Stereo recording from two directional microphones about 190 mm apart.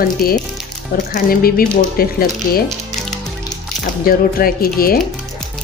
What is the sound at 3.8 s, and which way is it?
Speech, 50° left (ahead or behind).